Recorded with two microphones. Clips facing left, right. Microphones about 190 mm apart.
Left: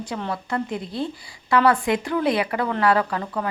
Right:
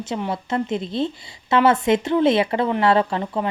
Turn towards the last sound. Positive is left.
turn(degrees=-20)  # may be behind; listen again after turning